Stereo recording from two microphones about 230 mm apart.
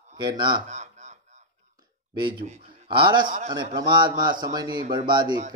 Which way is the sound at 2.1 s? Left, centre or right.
Right.